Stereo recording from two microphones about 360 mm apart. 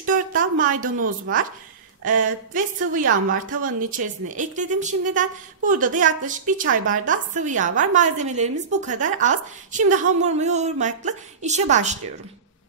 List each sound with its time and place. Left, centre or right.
0.0 s a sound: right
0.9 s speech: right
2.0 s a woman's voice: right